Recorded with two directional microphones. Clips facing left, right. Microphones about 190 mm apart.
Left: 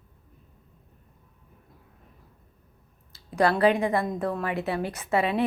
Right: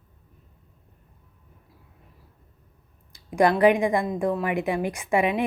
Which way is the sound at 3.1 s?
15° right (ahead or behind).